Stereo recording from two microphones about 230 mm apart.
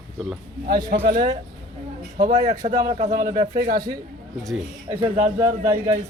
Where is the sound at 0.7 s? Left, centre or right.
Centre.